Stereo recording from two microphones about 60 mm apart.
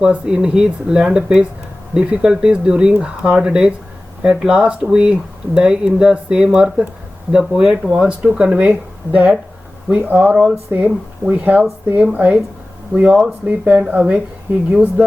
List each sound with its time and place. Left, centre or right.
0.0 s speech: centre
10.8 s speech: right